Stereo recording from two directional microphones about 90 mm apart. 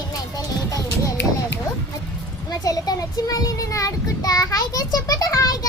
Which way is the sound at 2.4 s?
45° left (ahead or behind).